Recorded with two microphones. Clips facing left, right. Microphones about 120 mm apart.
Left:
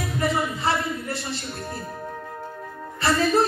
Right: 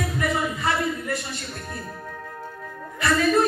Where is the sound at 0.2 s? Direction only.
30° left (ahead or behind).